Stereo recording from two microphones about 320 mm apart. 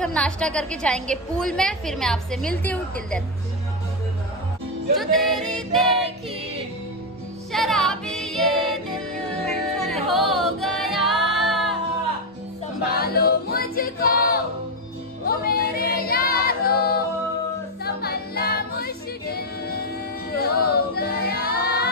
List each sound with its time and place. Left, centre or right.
0.0 s a woman's voice: centre
4.9 s a woman's voice: centre
7.5 s music: centre
12.8 s choir: left
15.2 s female singing: left
20.3 s music: left
21.5 s child singing: left